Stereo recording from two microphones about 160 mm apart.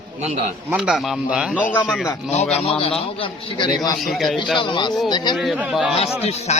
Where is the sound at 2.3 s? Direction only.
45° left (ahead or behind).